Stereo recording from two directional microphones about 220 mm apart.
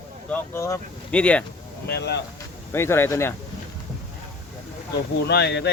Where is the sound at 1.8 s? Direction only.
50° left (ahead or behind).